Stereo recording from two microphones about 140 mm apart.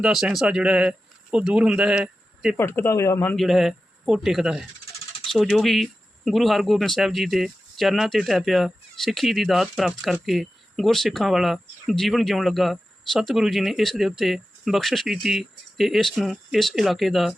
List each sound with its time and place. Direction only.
0.0 s speech: 5° right (ahead or behind)
2.6 s speech: 15° left (ahead or behind)
3.3 s speech: centre (ahead or behind)